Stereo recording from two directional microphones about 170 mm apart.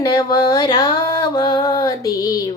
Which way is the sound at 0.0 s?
25° left (ahead or behind).